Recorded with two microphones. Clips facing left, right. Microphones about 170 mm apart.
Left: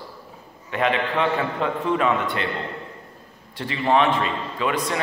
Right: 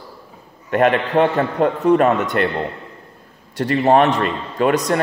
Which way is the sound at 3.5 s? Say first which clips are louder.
Right 6 dB; 45° right (ahead or behind).